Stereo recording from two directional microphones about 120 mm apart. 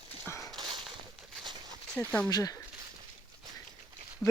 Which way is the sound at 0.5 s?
40° right (ahead or behind).